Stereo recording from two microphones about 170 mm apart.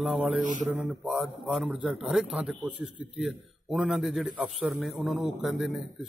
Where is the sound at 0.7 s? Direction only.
5° right (ahead or behind).